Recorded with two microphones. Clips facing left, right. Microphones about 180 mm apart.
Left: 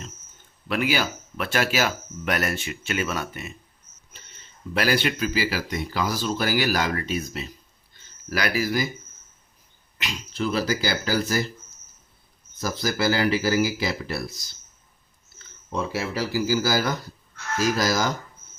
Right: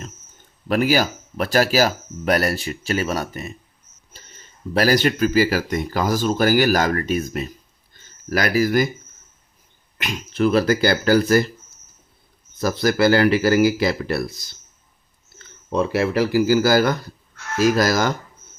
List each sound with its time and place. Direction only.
0.7 s speech: 40° right (ahead or behind)
10.0 s speech: 55° right (ahead or behind)
12.5 s speech: 60° right (ahead or behind)
15.4 s speech: 60° right (ahead or behind)